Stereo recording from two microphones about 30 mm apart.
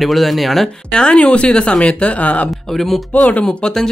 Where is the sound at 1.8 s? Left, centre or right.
Left.